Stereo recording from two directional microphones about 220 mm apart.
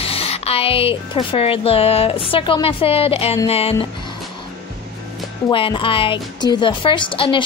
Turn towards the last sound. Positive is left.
turn(degrees=25)  # may be behind; listen again after turning